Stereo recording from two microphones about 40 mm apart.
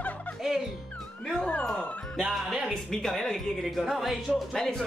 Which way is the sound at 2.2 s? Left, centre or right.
Centre.